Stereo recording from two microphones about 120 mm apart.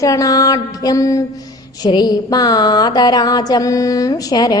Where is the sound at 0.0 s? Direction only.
30° left (ahead or behind).